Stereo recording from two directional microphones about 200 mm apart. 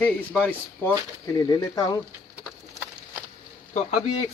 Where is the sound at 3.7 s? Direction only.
35° left (ahead or behind).